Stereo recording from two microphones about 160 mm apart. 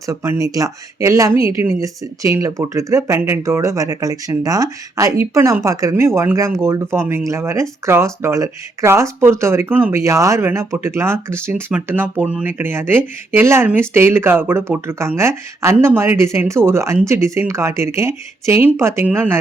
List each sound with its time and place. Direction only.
0.0 s speech: 20° right (ahead or behind)